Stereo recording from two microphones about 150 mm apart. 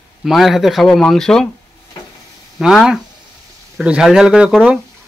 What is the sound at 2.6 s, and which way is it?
Speech, 5° right (ahead or behind).